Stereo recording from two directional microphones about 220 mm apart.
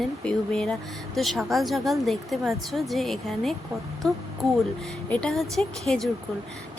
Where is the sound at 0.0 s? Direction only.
Centre (ahead or behind).